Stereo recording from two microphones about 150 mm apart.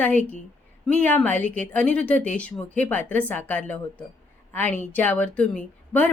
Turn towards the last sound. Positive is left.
turn(degrees=10)  # may be behind; listen again after turning